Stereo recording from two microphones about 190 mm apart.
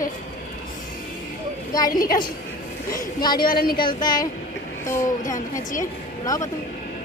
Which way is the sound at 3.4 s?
50° left (ahead or behind).